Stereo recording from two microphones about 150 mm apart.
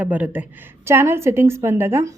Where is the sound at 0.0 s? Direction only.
10° right (ahead or behind).